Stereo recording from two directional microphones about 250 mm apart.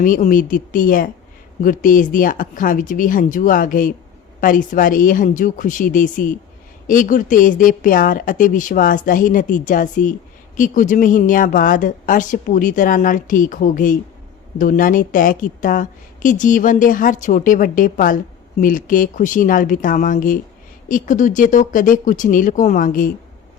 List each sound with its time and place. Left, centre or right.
0.0 s a woman's voice: left